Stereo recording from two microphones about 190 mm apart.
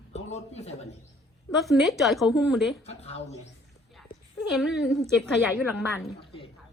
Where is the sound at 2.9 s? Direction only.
35° left (ahead or behind).